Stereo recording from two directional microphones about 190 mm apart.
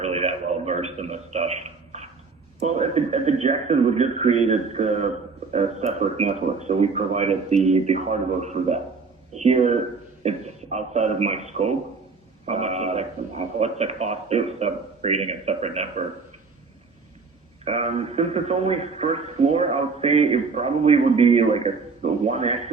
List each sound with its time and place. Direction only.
0.0 s a sound: 35° right (ahead or behind)
2.6 s a man's voice: 35° right (ahead or behind)
17.7 s a man's voice: 35° right (ahead or behind)